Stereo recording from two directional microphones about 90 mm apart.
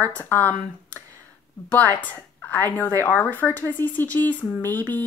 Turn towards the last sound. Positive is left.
turn(degrees=20)  # may be behind; listen again after turning